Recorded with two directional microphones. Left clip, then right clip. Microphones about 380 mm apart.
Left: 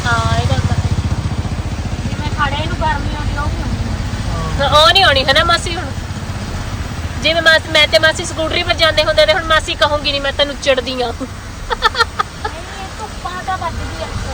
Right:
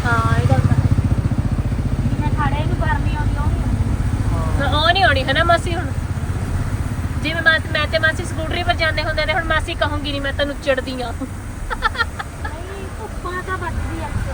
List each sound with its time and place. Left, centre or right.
4.6 s speech: centre
7.2 s speech: centre
11.7 s a sound: centre